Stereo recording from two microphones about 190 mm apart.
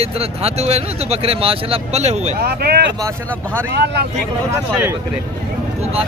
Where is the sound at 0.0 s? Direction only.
35° right (ahead or behind).